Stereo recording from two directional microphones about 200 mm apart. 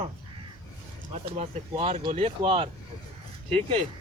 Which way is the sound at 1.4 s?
30° right (ahead or behind).